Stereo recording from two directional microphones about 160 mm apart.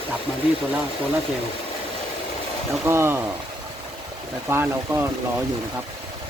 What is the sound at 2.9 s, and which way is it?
Speech, 15° right (ahead or behind).